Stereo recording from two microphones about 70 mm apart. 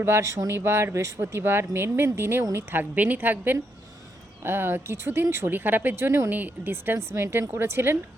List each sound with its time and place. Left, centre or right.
0.0 s speech: right
1.2 s speech: right
2.9 s a woman's voice: right